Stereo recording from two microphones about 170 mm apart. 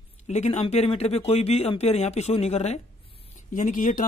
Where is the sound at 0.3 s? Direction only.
40° left (ahead or behind).